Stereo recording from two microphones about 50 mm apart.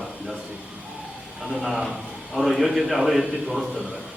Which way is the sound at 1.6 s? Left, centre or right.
Centre.